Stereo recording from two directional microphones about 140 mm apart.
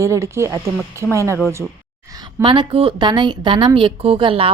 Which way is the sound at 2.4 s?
35° right (ahead or behind).